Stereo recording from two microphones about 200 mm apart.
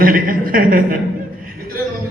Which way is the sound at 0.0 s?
45° right (ahead or behind).